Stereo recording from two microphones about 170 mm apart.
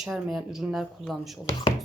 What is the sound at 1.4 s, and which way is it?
Speech, 20° left (ahead or behind).